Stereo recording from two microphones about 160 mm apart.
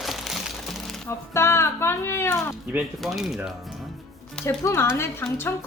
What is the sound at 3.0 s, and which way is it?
Speech, centre (ahead or behind).